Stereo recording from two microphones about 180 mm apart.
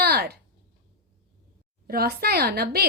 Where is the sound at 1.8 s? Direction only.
60° right (ahead or behind).